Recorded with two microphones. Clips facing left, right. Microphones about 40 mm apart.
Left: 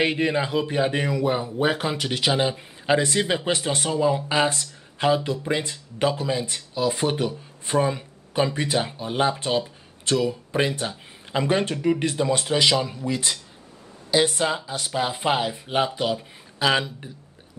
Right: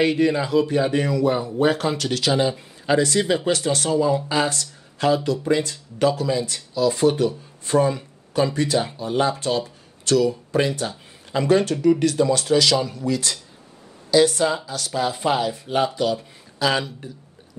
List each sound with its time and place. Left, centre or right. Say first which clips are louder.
0.0 s speech: right 3 dB; left